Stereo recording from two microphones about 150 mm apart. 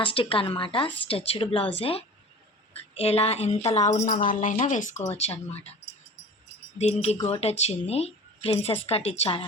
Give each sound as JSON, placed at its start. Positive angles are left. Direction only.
{"t": 0.0, "sound": "a woman's voice", "side_deg": 35}